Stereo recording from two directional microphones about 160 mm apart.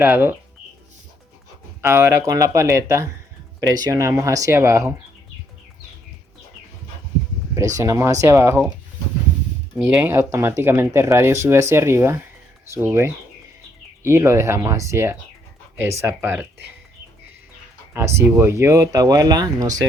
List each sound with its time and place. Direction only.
0.0 s speech: 15° right (ahead or behind)
1.8 s speech: 15° right (ahead or behind)
7.8 s speech: 20° right (ahead or behind)
9.9 s speech: 15° right (ahead or behind)
17.9 s speech: 15° right (ahead or behind)